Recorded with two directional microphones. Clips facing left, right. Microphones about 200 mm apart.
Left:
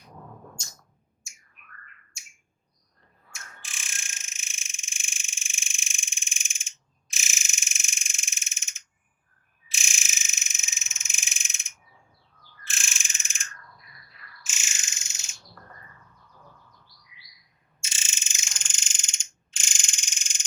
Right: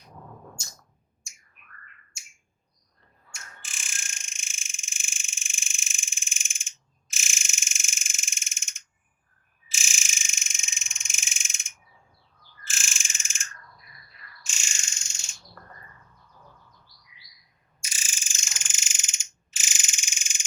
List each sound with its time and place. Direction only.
1.2 s bird: centre (ahead or behind)
3.3 s fire alarm: centre (ahead or behind)
9.6 s frog: centre (ahead or behind)
17.7 s ratchet: 25° left (ahead or behind)
18.5 s frog: 5° right (ahead or behind)